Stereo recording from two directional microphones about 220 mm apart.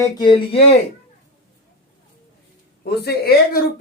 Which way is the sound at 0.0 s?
20° left (ahead or behind).